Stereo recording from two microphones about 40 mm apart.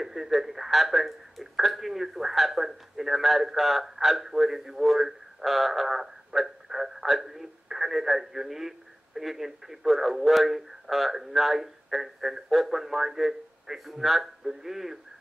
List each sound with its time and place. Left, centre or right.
0.0 s speech: centre